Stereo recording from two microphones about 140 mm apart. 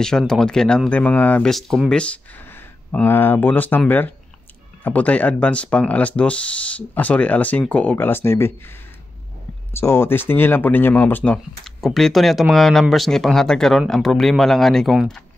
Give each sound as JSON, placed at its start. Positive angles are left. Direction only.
{"t": 0.3, "sound": "speech", "side_deg": 5}
{"t": 9.8, "sound": "speech", "side_deg": 15}
{"t": 11.3, "sound": "speech", "side_deg": 0}